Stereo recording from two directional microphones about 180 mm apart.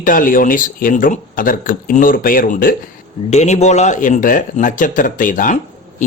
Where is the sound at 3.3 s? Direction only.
40° left (ahead or behind).